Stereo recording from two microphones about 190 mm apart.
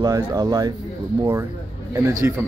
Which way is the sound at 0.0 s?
20° right (ahead or behind).